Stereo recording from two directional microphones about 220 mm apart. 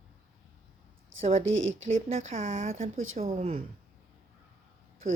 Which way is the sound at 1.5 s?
60° right (ahead or behind).